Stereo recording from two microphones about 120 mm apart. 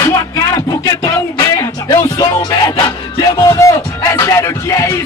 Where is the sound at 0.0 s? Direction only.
30° left (ahead or behind).